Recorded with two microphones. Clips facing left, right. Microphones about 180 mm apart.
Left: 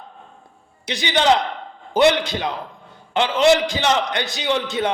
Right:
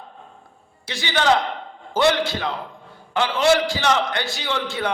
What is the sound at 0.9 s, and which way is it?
A man's voice, 20° left (ahead or behind).